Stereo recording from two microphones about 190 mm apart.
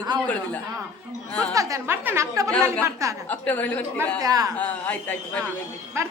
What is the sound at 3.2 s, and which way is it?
Speech, 10° left (ahead or behind).